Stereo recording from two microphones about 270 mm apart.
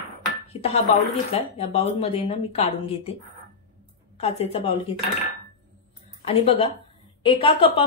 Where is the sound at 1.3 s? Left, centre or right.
Left.